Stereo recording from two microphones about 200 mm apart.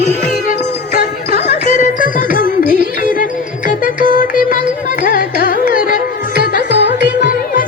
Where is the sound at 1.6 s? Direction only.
40° left (ahead or behind).